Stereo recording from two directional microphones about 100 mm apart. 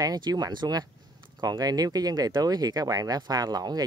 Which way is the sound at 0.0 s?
40° right (ahead or behind).